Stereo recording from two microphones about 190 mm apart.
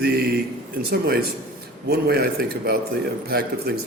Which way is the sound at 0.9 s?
55° right (ahead or behind).